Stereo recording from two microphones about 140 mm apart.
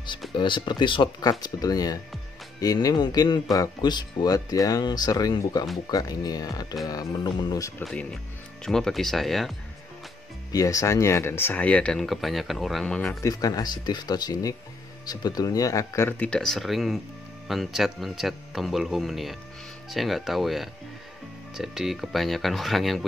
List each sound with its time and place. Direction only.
0.3 s speech: 35° left (ahead or behind)
7.8 s speech: 10° left (ahead or behind)
10.5 s speech: 25° left (ahead or behind); by 13.2 s 5° left (ahead or behind)
13.2 s speech: 25° left (ahead or behind); by 23.0 s centre (ahead or behind)